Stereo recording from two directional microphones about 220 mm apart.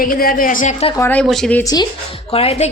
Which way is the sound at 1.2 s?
Centre (ahead or behind).